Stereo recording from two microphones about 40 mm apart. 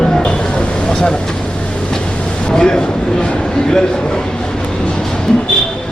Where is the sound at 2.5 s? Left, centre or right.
Centre.